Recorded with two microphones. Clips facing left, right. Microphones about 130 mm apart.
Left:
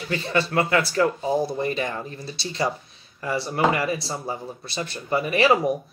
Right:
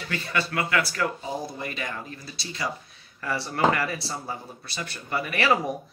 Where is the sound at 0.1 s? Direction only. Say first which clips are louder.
Left 6 dB; 30° left (ahead or behind).